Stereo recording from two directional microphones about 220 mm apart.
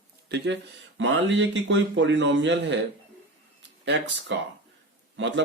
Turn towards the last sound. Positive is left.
turn(degrees=-55)  # may be behind; listen again after turning